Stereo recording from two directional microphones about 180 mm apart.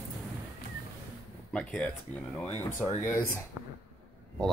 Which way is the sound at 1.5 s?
5° left (ahead or behind).